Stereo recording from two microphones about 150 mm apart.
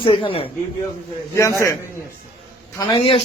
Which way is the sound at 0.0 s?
35° left (ahead or behind).